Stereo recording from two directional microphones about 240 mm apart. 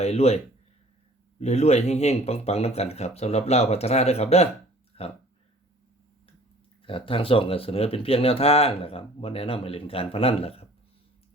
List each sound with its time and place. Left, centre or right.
0.0 s speech: left
1.4 s speech: left
6.8 s speech: left